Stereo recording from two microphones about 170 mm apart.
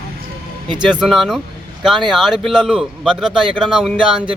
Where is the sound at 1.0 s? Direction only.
Centre (ahead or behind).